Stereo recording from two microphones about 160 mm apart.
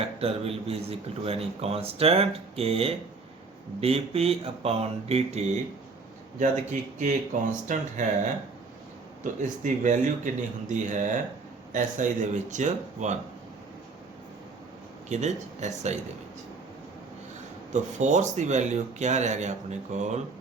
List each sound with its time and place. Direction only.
0.2 s a man's voice: 40° right (ahead or behind)
6.4 s speech: 50° right (ahead or behind)
9.2 s speech: 50° right (ahead or behind)
15.1 s speech: 45° right (ahead or behind)
17.7 s speech: 50° right (ahead or behind)